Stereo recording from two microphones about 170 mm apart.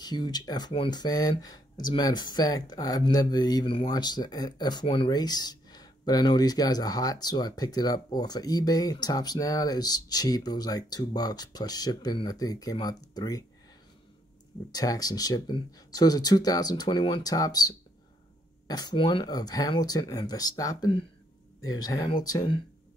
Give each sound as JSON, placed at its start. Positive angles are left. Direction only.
{"t": 0.0, "sound": "speech", "side_deg": 25}
{"t": 14.7, "sound": "speech", "side_deg": 20}